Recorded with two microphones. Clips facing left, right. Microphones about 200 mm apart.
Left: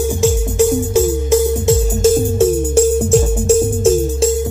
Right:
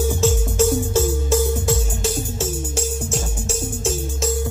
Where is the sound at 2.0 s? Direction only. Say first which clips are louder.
Left 15 dB; 50° left (ahead or behind).